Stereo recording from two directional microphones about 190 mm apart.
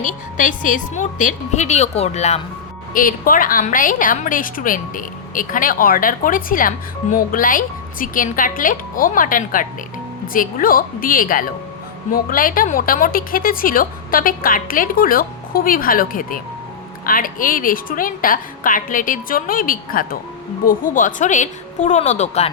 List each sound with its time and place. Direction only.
0.0 s a woman's voice: 45° left (ahead or behind)
2.9 s a woman's voice: 45° left (ahead or behind)